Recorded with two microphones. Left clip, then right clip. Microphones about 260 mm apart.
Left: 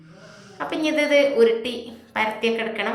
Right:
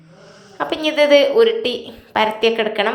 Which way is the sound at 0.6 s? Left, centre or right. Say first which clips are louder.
Right 6 dB; centre.